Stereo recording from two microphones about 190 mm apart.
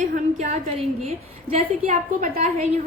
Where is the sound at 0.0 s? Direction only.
35° right (ahead or behind).